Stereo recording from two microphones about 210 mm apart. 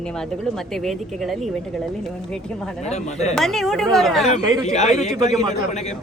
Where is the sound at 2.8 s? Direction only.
30° left (ahead or behind).